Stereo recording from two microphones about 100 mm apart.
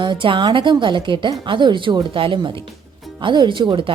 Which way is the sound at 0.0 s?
55° right (ahead or behind).